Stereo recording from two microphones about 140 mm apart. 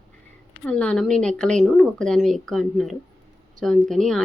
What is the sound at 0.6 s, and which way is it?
Speech, 10° left (ahead or behind).